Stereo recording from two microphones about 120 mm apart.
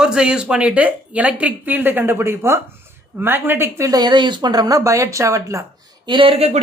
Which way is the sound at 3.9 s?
35° right (ahead or behind).